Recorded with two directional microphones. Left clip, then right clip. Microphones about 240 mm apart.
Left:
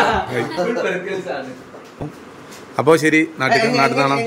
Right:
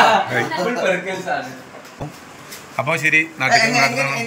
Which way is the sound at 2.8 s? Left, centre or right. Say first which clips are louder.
Left 3 dB; left.